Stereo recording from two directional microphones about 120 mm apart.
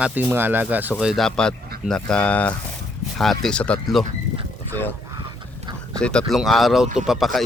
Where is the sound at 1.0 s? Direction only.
Centre (ahead or behind).